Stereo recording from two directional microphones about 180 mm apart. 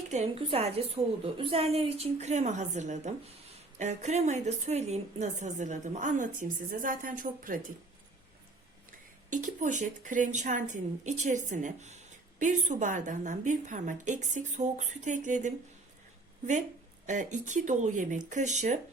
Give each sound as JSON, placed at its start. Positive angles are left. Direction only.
{"t": 0.1, "sound": "a woman's voice", "side_deg": -35}
{"t": 8.9, "sound": "speech", "side_deg": -45}
{"t": 17.1, "sound": "a woman's voice", "side_deg": -45}